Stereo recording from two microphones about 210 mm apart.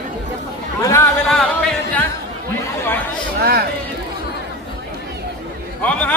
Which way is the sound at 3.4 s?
45° right (ahead or behind).